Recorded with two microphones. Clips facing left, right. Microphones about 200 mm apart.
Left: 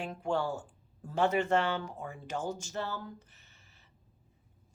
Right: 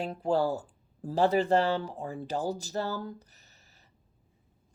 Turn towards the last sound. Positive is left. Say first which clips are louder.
# right 2 dB
turn(degrees=-40)  # may be behind; listen again after turning